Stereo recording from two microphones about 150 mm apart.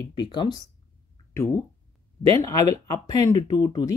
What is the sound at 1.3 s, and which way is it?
Speech, 20° left (ahead or behind).